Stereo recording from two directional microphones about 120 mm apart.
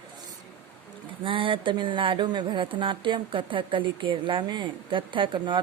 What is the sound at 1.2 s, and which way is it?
Speech, 45° right (ahead or behind).